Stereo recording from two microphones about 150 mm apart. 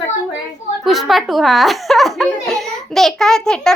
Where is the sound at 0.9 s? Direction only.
Centre (ahead or behind).